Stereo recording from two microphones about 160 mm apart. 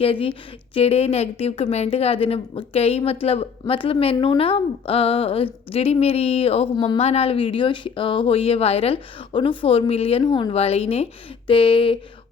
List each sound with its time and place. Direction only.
0.0 s a woman's voice: 35° left (ahead or behind)
10.2 s speech: 25° left (ahead or behind)
10.5 s a woman's voice: 40° left (ahead or behind)